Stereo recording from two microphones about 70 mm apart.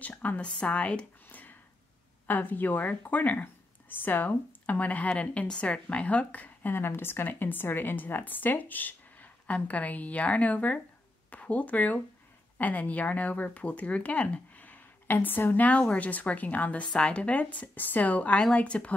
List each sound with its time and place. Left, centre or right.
0.0 s speech: left